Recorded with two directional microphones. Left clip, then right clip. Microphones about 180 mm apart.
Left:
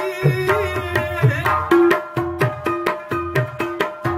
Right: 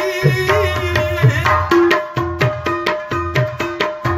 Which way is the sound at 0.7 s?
60° left (ahead or behind).